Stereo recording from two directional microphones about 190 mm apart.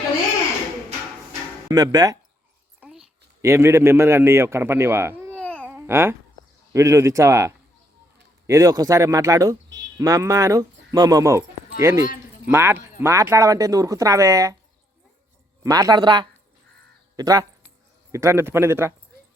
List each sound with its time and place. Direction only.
1.6 s speech: 20° right (ahead or behind)
2.8 s a sound: centre (ahead or behind)
3.4 s a man's voice: 15° right (ahead or behind)
5.6 s babbling: 10° right (ahead or behind)
6.7 s a man's voice: 15° right (ahead or behind)
15.6 s a man's voice: 20° right (ahead or behind)